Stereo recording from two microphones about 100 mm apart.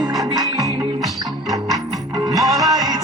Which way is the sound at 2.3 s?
40° right (ahead or behind).